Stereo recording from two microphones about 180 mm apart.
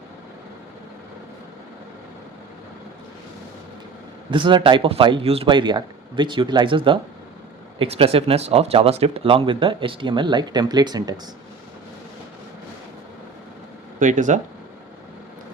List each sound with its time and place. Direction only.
4.3 s speech: 25° right (ahead or behind)
14.0 s speech: 45° right (ahead or behind)